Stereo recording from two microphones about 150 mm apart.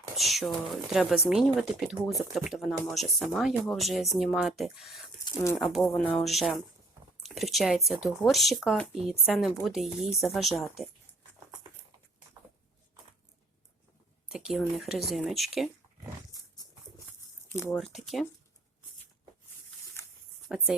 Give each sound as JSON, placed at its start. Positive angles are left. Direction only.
{"t": 0.2, "sound": "speech", "side_deg": 0}
{"t": 5.2, "sound": "a sound", "side_deg": 20}
{"t": 5.7, "sound": "speech", "side_deg": 5}
{"t": 14.3, "sound": "a sound", "side_deg": -5}
{"t": 14.8, "sound": "speech", "side_deg": 0}
{"t": 17.7, "sound": "speech", "side_deg": 0}
{"t": 20.5, "sound": "speech", "side_deg": 0}